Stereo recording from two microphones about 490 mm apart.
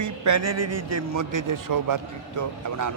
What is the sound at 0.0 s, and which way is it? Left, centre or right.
A man's voice, right.